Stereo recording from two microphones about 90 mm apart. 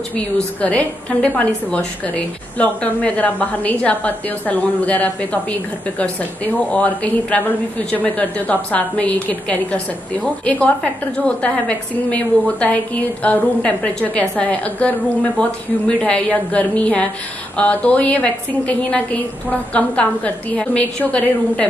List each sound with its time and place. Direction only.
0.1 s a woman's voice: 15° left (ahead or behind)
16.0 s a woman's voice: 15° left (ahead or behind)